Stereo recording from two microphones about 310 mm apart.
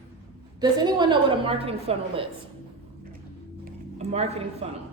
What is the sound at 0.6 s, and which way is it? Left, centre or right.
A woman's voice, centre.